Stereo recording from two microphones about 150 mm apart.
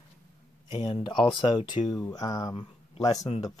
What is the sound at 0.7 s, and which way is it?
Speech, 50° left (ahead or behind).